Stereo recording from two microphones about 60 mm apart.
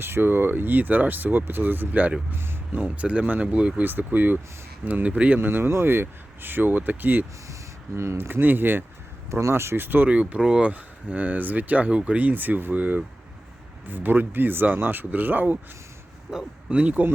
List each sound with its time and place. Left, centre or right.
0.0 s speech: right
2.3 s speech: right
2.7 s speech: right
3.8 s speech: right
5.4 s speech: right
7.9 s speech: right
8.3 s speech: right
9.3 s speech: right
10.1 s speech: right
10.7 s speech: right
16.3 s speech: centre
16.8 s speech: right